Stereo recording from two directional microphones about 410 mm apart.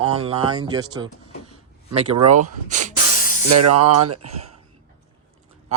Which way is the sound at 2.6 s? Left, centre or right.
Centre.